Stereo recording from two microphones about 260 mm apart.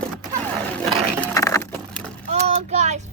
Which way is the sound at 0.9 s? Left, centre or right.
Centre.